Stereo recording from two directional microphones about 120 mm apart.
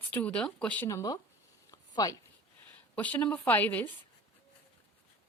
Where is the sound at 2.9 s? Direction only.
10° left (ahead or behind).